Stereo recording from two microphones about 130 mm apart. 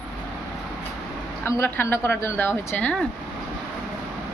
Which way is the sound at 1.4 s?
20° left (ahead or behind).